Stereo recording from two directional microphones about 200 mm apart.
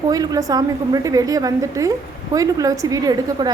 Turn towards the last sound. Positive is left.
turn(degrees=-20)  # may be behind; listen again after turning